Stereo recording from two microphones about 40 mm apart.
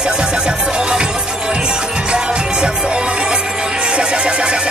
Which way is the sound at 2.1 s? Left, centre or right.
Right.